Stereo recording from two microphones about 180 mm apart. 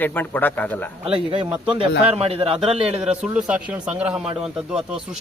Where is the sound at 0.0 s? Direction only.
10° left (ahead or behind).